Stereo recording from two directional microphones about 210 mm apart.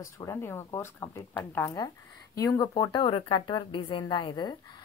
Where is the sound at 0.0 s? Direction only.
15° left (ahead or behind).